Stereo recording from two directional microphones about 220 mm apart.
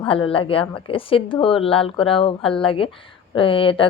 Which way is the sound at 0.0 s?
25° left (ahead or behind).